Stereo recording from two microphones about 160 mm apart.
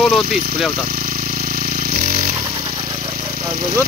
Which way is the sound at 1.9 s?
60° right (ahead or behind).